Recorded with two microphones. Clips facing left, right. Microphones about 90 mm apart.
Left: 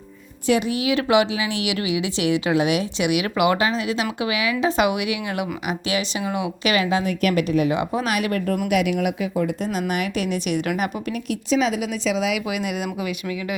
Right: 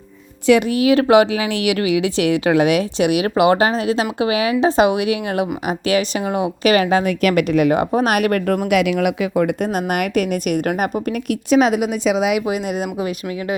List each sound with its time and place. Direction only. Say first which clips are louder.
0.7 s speech: right 6 dB; 45° right (ahead or behind)
7.0 s a woman's voice: right 4 dB; 80° right
7.7 s speech: right 6 dB; 50° right (ahead or behind)
8.7 s speech: right 4 dB; 90° right; by 12.4 s 55° right (ahead or behind)
12.5 s speech: right 4 dB; 35° right (ahead or behind)